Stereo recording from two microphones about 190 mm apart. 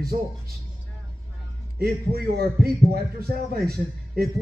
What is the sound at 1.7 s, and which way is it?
A man's voice, 55° right (ahead or behind).